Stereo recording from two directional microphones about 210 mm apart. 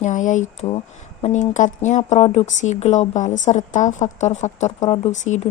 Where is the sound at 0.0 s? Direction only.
35° left (ahead or behind).